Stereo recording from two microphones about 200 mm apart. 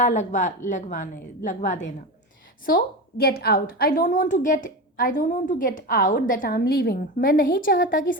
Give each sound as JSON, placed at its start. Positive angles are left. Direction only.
{"t": 0.0, "sound": "a woman's voice", "side_deg": 35}
{"t": 2.6, "sound": "a woman's voice", "side_deg": 50}